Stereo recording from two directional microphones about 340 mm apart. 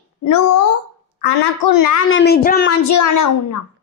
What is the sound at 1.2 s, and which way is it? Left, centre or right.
Speech, left.